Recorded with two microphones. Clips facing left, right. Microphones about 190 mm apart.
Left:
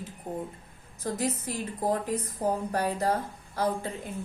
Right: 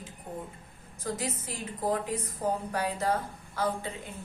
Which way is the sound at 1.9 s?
40° left (ahead or behind).